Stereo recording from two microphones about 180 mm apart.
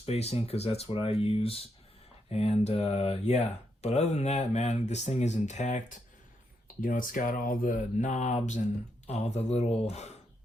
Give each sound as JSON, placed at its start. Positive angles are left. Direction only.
{"t": 0.0, "sound": "speech", "side_deg": 35}
{"t": 6.8, "sound": "speech", "side_deg": 50}